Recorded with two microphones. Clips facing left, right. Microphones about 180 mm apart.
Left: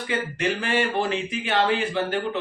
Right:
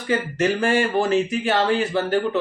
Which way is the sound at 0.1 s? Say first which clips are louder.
Right 6 dB; 45° right (ahead or behind).